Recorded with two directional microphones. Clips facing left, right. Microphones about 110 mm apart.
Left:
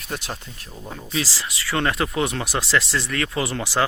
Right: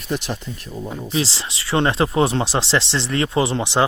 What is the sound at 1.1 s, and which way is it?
Speech, 25° right (ahead or behind).